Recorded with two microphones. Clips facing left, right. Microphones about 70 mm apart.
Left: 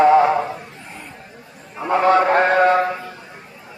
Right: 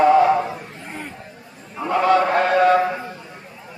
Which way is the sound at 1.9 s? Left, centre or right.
Left.